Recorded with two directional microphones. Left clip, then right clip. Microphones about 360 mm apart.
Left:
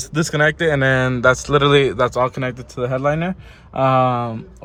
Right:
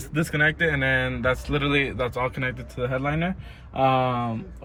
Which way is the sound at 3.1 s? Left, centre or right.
Left.